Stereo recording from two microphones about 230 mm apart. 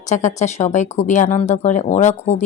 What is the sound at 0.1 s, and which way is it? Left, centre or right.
A woman's voice, left.